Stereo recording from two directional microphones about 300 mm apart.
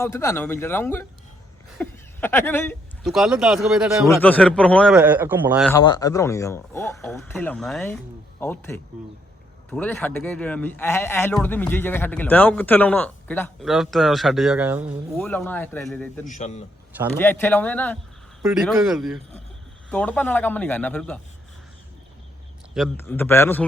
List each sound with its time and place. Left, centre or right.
0.0 s a man's voice: centre
5.6 s a man's voice: centre
16.2 s a man's voice: left
17.2 s a man's voice: centre
22.7 s speech: centre